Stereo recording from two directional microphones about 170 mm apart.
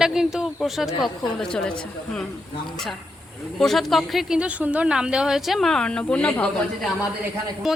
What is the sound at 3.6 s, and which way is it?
A woman's voice, centre (ahead or behind).